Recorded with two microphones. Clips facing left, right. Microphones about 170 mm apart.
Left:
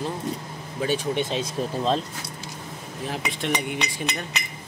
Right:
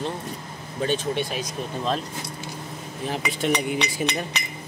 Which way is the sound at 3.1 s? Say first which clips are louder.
Right 3 dB; centre (ahead or behind).